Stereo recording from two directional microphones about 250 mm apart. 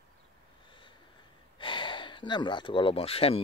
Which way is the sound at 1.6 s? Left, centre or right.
Centre.